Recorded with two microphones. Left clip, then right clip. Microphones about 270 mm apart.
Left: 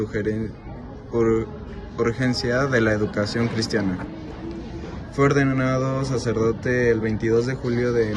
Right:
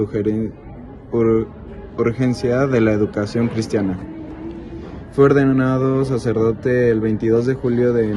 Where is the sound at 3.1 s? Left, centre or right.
Centre.